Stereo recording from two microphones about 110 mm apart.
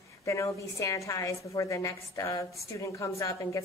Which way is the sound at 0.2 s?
30° left (ahead or behind).